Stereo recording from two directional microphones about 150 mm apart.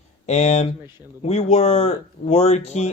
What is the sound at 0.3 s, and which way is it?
Speech, 50° left (ahead or behind).